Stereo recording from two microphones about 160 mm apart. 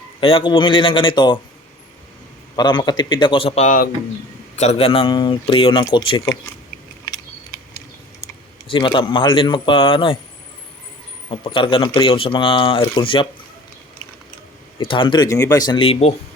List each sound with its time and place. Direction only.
0.2 s a man's voice: 35° left (ahead or behind)
2.6 s a man's voice: 25° left (ahead or behind)
8.7 s a man's voice: 30° left (ahead or behind)
11.3 s a man's voice: 35° left (ahead or behind)
14.8 s speech: 30° left (ahead or behind)